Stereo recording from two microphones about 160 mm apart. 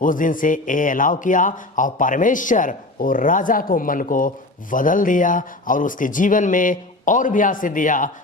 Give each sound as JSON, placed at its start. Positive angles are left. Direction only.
{"t": 0.0, "sound": "a man's voice", "side_deg": 55}